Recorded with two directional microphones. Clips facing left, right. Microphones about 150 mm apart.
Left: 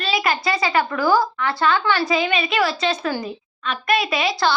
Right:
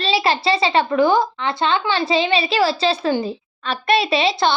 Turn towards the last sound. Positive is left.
turn(degrees=-25)  # may be behind; listen again after turning